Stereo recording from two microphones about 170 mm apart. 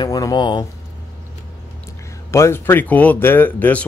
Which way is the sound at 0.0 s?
20° left (ahead or behind).